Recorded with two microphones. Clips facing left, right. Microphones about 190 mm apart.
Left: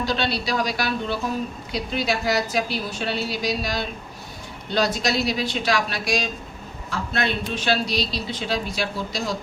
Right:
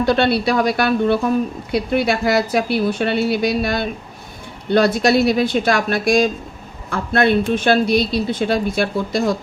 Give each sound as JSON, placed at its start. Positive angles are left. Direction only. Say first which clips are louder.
{"t": 0.0, "sound": "a woman's voice", "louder": "right 9 dB", "side_deg": -60}